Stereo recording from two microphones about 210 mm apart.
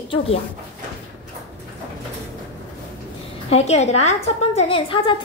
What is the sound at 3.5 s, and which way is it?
A woman's voice, 30° left (ahead or behind).